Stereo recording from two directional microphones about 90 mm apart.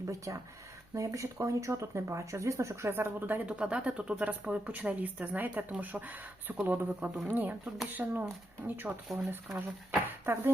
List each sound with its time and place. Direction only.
0.3 s speech: 40° right (ahead or behind); by 10.5 s 25° right (ahead or behind)